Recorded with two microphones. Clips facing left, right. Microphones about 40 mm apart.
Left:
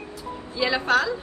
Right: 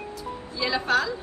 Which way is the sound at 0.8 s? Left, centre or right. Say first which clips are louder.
Left 2 dB; centre.